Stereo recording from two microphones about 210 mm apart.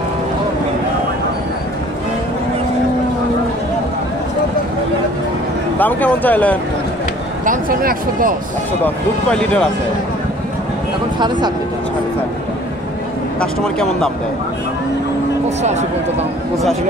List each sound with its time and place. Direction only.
5.8 s speech: 10° left (ahead or behind)
7.4 s speech: 40° right (ahead or behind)
8.8 s speech: 5° left (ahead or behind)
11.1 s speech: 20° right (ahead or behind)
13.4 s speech: 5° left (ahead or behind)